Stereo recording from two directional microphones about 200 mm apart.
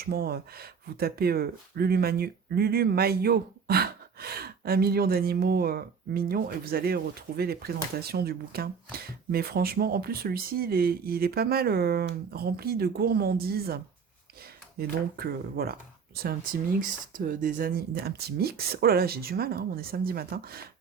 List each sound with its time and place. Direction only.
0.0 s speech: 50° right (ahead or behind)
17.2 s speech: 45° right (ahead or behind)